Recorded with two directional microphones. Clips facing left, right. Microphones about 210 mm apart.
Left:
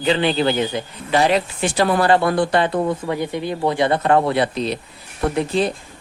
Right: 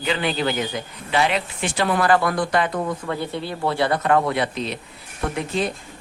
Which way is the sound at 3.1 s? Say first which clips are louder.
Left 4 dB; 15° left (ahead or behind).